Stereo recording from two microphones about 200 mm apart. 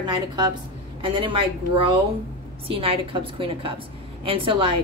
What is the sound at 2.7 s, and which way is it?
A woman's voice, 25° right (ahead or behind).